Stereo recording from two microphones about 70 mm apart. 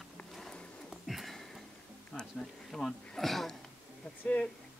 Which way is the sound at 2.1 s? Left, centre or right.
Centre.